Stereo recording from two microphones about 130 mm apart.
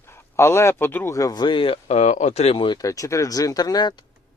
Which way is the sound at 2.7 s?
25° left (ahead or behind).